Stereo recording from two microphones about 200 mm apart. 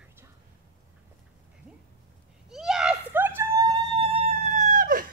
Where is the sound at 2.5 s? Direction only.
Centre (ahead or behind).